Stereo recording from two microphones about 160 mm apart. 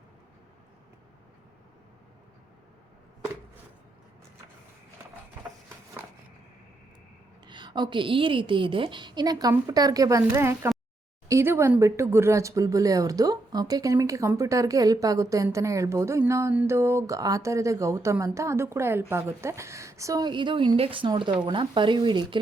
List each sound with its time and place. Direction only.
7.4 s speech: 30° right (ahead or behind)